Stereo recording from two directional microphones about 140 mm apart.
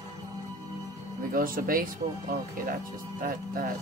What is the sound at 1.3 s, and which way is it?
Speech, 90° right.